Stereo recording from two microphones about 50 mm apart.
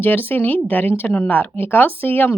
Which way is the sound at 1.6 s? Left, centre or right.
Left.